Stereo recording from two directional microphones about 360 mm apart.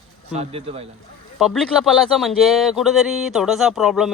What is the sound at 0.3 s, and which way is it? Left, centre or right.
Speech, centre.